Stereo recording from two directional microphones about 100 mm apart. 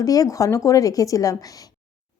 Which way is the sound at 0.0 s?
35° left (ahead or behind).